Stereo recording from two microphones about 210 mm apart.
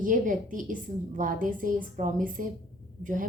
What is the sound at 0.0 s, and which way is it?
A woman's voice, 40° right (ahead or behind).